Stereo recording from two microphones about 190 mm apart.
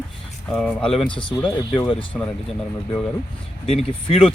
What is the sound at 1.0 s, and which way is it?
Speech, 25° left (ahead or behind).